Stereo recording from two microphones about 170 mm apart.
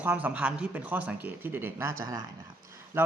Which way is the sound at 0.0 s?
10° right (ahead or behind).